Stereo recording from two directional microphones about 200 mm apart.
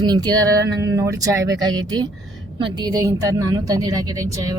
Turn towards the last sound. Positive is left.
turn(degrees=-15)  # may be behind; listen again after turning